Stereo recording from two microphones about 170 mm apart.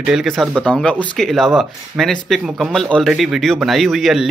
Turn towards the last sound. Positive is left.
turn(degrees=0)  # may be behind; listen again after turning